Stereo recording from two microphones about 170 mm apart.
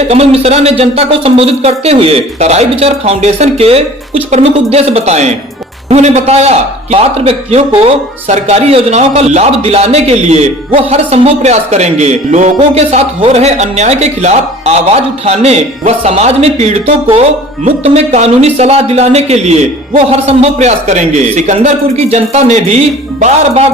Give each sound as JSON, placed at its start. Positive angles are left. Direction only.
{"t": 0.1, "sound": "a man's voice", "side_deg": -40}